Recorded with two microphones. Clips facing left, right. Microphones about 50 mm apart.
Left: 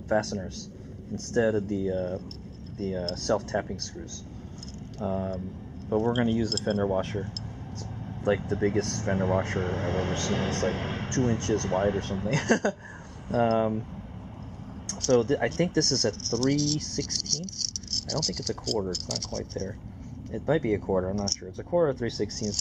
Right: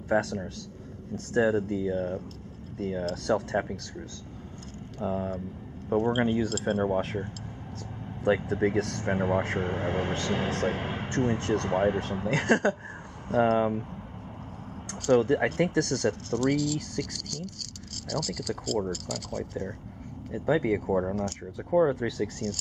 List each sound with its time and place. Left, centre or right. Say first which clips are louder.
0.1 s speech: even; centre
4.9 s speech: even; centre
14.9 s speech: right 1 dB; centre